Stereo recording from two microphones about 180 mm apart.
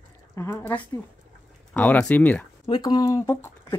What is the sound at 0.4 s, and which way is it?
A woman's voice, 15° left (ahead or behind).